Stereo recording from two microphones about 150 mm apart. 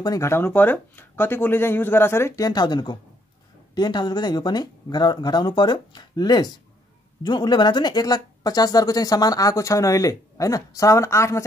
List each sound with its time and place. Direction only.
0.0 s speech: 20° left (ahead or behind)